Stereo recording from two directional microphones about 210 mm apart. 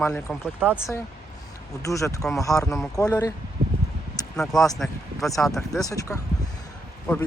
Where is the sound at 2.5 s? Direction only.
Centre (ahead or behind).